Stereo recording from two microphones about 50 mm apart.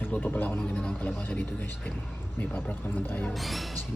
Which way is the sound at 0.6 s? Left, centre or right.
Left.